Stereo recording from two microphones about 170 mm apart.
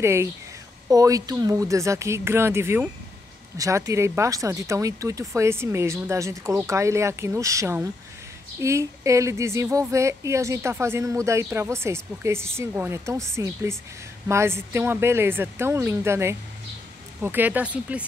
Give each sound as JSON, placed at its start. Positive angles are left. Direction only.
{"t": 0.0, "sound": "speech", "side_deg": -15}